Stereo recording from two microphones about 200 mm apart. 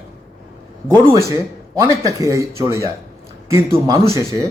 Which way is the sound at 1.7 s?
15° right (ahead or behind).